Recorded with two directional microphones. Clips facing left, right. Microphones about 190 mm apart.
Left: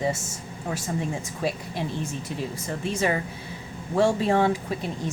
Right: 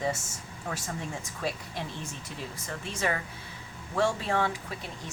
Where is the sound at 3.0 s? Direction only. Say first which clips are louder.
Left 5 dB; 20° left (ahead or behind).